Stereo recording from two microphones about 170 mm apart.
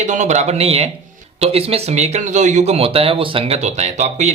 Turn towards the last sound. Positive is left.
turn(degrees=-45)  # may be behind; listen again after turning